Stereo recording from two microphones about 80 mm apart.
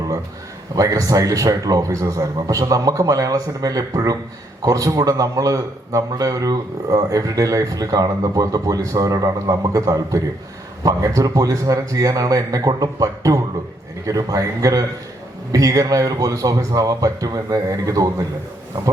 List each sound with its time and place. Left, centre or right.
0.8 s a man's voice: right